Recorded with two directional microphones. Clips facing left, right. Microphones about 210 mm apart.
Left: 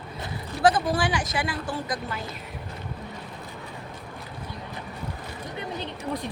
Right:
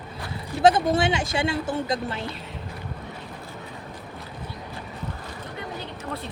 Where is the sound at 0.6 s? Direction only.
25° right (ahead or behind).